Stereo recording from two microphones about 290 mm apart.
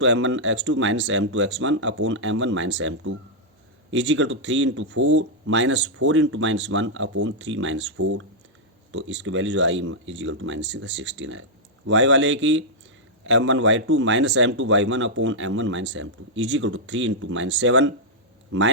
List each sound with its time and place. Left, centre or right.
0.0 s speech: right